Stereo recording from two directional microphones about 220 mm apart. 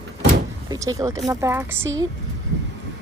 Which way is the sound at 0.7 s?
15° right (ahead or behind).